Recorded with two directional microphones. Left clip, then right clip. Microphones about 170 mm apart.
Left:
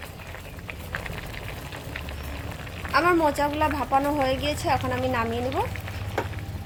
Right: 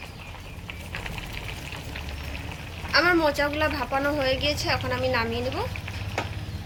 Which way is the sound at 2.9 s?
50° left (ahead or behind).